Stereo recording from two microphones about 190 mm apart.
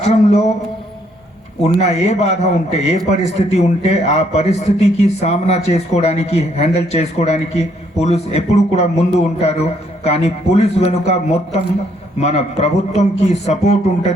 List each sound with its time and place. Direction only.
0.0 s speech: 35° left (ahead or behind)
1.6 s speech: 35° left (ahead or behind)